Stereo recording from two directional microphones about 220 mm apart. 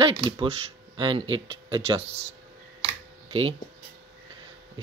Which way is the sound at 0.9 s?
20° right (ahead or behind).